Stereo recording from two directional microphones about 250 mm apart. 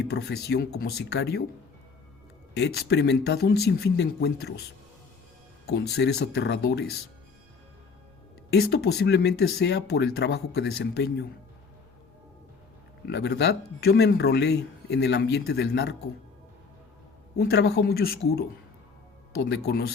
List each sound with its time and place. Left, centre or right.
0.0 s speech: left
2.6 s speech: left
5.6 s speech: left
8.5 s speech: left
13.1 s speech: left
17.3 s speech: left